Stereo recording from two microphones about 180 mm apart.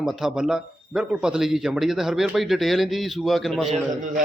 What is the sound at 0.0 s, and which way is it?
Speech, centre (ahead or behind).